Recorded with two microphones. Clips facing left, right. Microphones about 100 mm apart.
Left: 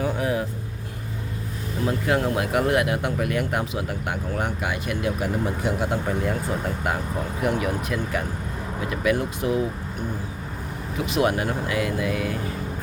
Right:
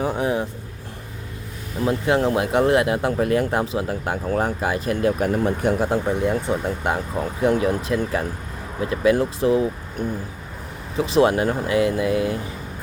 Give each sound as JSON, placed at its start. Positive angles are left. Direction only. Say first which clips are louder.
{"t": 0.0, "sound": "speech", "louder": "right 2 dB", "side_deg": -30}
{"t": 1.8, "sound": "speech", "louder": "right 4 dB", "side_deg": -25}
{"t": 5.9, "sound": "speech", "louder": "right 4 dB", "side_deg": -25}
{"t": 10.9, "sound": "speech", "louder": "right 5 dB", "side_deg": -30}